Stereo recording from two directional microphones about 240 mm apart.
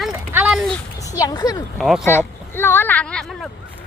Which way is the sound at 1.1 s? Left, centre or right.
Centre.